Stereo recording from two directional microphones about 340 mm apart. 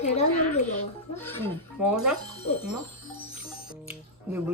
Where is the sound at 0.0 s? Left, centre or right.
Centre.